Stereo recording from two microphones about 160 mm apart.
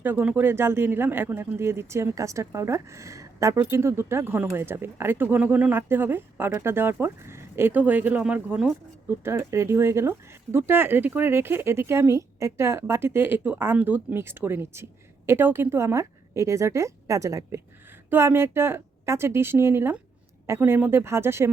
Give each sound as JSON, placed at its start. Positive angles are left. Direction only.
{"t": 0.0, "sound": "speech", "side_deg": -10}